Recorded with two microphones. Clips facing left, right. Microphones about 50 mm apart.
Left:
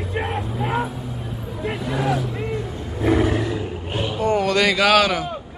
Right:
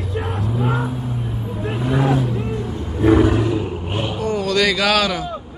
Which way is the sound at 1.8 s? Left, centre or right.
Right.